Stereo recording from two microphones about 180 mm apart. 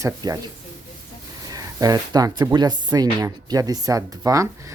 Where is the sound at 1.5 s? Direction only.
20° right (ahead or behind).